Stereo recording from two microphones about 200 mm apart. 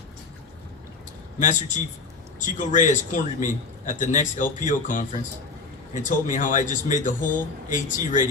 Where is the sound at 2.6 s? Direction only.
40° left (ahead or behind).